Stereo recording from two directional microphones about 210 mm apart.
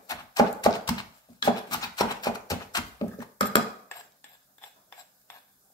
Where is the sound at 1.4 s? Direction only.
20° left (ahead or behind).